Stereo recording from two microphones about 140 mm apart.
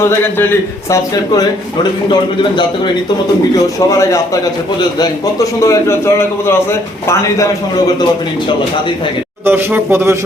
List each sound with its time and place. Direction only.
0.0 s a man's voice: 15° left (ahead or behind); by 2.9 s 35° left (ahead or behind)
3.8 s a man's voice: 25° left (ahead or behind)
5.6 s a man's voice: 20° left (ahead or behind)
9.5 s speech: 15° right (ahead or behind)